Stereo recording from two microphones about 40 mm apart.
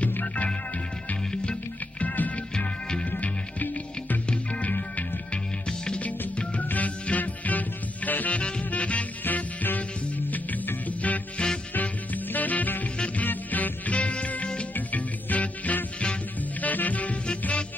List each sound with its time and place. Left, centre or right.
1.3 s music: left
2.0 s music: left
4.3 s music: left
8.4 s music: left
9.2 s music: left
11.4 s music: left
11.7 s music: left
12.8 s music: left
13.2 s music: left
14.7 s music: left